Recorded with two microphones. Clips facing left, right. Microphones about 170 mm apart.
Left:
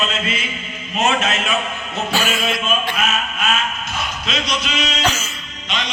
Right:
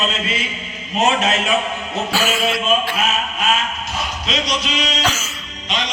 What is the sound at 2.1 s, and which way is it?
Speech, 10° right (ahead or behind).